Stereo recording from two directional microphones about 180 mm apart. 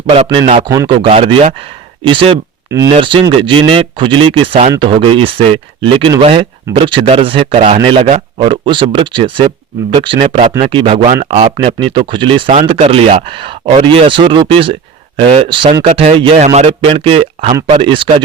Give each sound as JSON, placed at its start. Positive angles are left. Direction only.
{"t": 0.1, "sound": "speech", "side_deg": -30}
{"t": 2.6, "sound": "speech", "side_deg": -20}